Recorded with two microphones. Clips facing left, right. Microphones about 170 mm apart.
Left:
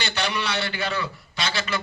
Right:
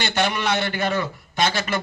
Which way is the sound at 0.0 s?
50° right (ahead or behind).